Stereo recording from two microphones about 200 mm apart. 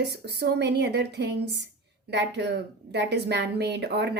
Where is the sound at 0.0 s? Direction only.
55° right (ahead or behind).